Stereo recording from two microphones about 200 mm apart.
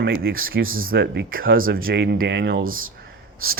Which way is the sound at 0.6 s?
90° right.